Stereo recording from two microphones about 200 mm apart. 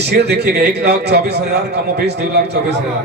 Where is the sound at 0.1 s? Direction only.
55° right (ahead or behind).